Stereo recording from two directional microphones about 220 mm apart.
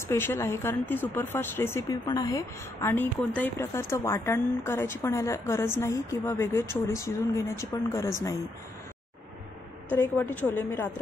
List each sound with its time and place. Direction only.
0.1 s speech: 10° left (ahead or behind)
9.9 s speech: 10° left (ahead or behind)